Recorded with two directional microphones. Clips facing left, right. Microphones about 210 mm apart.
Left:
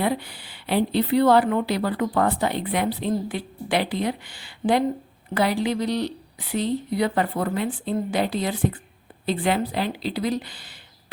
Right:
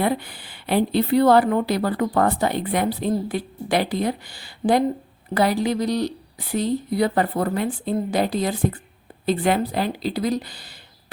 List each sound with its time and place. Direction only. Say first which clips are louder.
0.0 s a woman's voice: right 2 dB; 50° right (ahead or behind)